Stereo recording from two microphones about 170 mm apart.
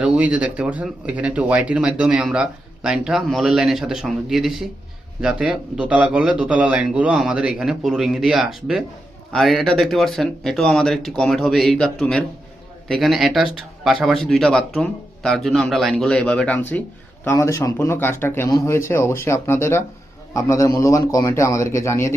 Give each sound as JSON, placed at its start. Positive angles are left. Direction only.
{"t": 0.0, "sound": "a man's voice", "side_deg": -5}